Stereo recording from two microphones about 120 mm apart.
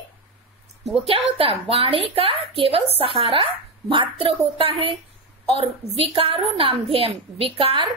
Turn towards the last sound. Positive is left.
turn(degrees=-50)  # may be behind; listen again after turning